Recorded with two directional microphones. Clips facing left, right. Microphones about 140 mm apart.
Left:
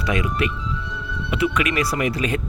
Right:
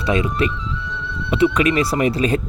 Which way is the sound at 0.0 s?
30° right (ahead or behind).